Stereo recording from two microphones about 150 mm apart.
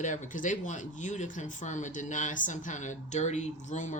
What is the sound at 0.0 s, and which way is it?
Speech, 55° left (ahead or behind).